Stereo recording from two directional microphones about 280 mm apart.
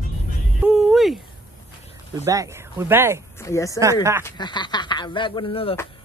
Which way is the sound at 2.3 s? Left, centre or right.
Centre.